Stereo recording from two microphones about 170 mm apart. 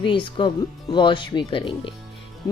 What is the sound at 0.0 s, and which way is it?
A woman's voice, 30° left (ahead or behind).